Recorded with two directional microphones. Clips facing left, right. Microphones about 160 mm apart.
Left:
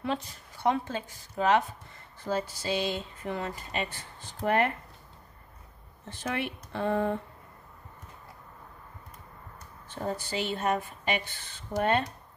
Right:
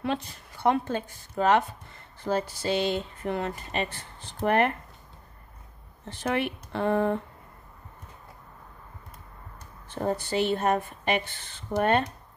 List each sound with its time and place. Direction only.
0.0 s speech: 60° right (ahead or behind)
6.0 s speech: 65° right (ahead or behind)
10.0 s a woman's voice: 50° right (ahead or behind)